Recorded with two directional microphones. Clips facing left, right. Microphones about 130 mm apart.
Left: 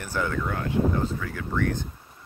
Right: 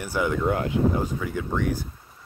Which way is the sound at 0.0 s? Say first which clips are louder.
Right 3 dB; 15° right (ahead or behind).